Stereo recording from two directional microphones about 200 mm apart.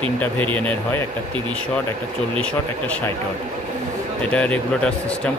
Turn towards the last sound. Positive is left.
turn(degrees=5)  # may be behind; listen again after turning